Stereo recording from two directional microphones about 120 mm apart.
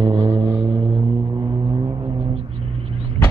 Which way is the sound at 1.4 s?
35° right (ahead or behind).